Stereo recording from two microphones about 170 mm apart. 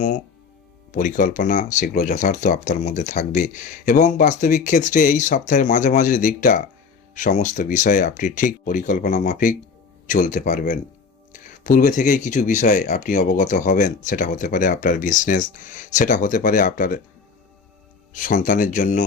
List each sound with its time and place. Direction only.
0.9 s speech: 50° left (ahead or behind)
18.1 s speech: 50° left (ahead or behind)